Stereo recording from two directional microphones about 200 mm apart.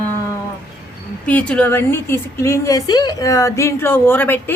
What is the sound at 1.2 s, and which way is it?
A woman's voice, 5° left (ahead or behind).